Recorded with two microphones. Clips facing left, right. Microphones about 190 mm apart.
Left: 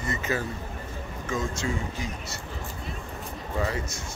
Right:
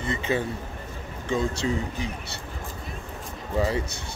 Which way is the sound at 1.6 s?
25° right (ahead or behind).